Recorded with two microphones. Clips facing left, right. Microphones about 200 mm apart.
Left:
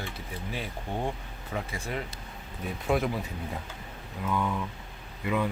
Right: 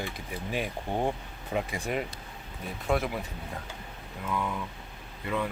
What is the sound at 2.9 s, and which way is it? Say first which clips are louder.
Speech: left 1 dB; centre (ahead or behind).